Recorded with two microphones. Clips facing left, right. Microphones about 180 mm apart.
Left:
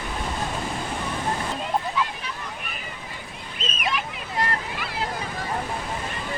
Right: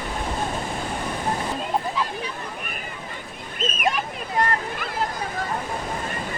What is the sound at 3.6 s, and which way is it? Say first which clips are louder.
Speech: right 4 dB; 45° right (ahead or behind).